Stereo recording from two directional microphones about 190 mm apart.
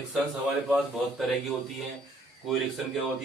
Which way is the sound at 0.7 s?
Centre (ahead or behind).